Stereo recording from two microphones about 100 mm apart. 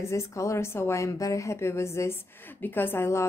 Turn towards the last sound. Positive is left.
turn(degrees=25)  # may be behind; listen again after turning